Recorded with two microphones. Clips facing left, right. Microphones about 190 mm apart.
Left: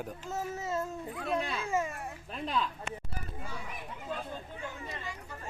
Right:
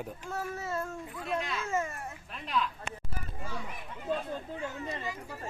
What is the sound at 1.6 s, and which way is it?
Dog, 15° left (ahead or behind).